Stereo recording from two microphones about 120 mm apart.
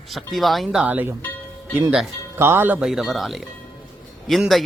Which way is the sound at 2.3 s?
20° right (ahead or behind).